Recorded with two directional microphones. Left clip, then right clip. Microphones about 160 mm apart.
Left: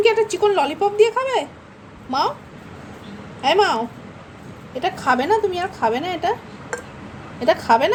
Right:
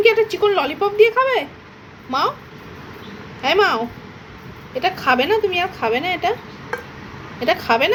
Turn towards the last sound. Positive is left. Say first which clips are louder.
# left 1 dB
turn(degrees=20)  # may be behind; listen again after turning